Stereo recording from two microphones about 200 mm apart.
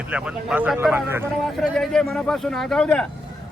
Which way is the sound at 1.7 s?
5° left (ahead or behind).